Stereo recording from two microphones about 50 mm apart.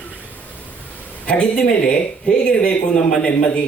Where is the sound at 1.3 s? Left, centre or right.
Centre.